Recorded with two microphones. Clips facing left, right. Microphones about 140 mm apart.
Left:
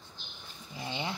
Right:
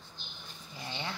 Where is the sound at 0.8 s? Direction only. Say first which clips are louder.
Left 3 dB; 20° left (ahead or behind).